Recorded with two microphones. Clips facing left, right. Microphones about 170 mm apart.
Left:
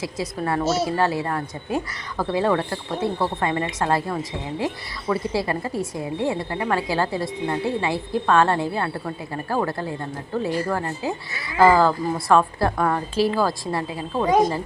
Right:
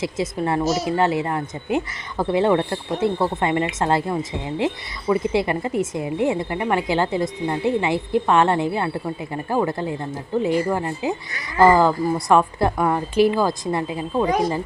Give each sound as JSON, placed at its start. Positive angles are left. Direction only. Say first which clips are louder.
{"t": 0.0, "sound": "a woman's voice", "louder": "right 3 dB", "side_deg": -25}